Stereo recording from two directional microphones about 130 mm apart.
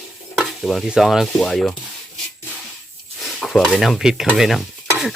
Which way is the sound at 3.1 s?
Centre (ahead or behind).